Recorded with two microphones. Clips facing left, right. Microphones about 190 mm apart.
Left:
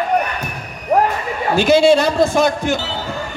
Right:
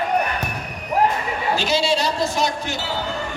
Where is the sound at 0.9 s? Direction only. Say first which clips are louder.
Left 4 dB; 55° left (ahead or behind).